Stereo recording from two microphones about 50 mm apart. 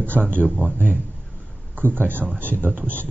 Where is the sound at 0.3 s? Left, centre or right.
Right.